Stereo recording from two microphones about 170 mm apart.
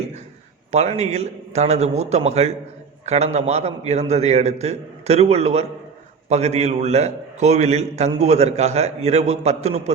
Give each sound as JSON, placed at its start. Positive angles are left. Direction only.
{"t": 0.7, "sound": "a man's voice", "side_deg": -40}